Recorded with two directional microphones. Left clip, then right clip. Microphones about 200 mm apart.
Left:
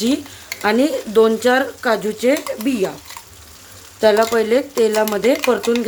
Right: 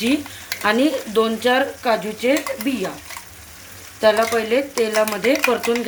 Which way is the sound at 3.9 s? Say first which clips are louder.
Left 2 dB; 50° left (ahead or behind).